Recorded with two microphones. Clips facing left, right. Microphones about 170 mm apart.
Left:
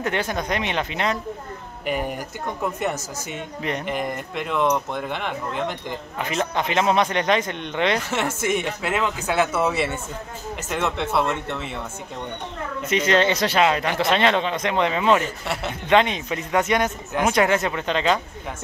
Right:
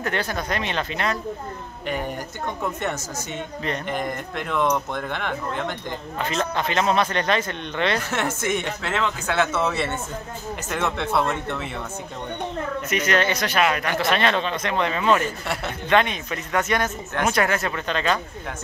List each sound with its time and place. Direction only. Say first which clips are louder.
0.0 s speech: left 2 dB; 15° left (ahead or behind)
1.9 s speech: left 2 dB; 5° left (ahead or behind)
6.1 s speech: left 1 dB; 15° left (ahead or behind)
8.1 s speech: left 1 dB; 5° left (ahead or behind)
12.9 s speech: left 3 dB; 25° left (ahead or behind)
15.4 s speech: left 1 dB; 5° left (ahead or behind)
15.9 s speech: left 2 dB; 20° left (ahead or behind)